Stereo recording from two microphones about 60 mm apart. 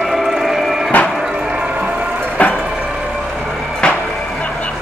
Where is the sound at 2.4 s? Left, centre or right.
Left.